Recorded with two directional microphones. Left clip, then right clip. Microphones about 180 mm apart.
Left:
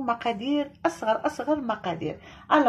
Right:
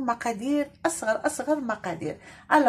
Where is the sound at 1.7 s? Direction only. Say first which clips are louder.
Left 1 dB; centre (ahead or behind).